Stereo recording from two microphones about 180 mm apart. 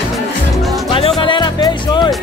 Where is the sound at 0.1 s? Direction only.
Centre (ahead or behind).